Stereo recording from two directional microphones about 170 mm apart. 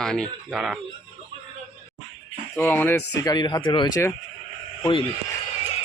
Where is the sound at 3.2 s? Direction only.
25° left (ahead or behind).